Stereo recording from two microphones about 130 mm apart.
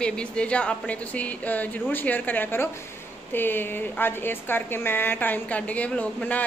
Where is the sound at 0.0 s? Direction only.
10° left (ahead or behind).